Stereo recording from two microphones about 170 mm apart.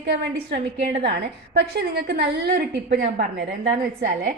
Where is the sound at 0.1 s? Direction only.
90° right.